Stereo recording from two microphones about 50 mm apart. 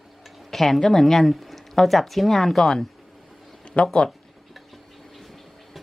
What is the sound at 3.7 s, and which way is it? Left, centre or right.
Speech, left.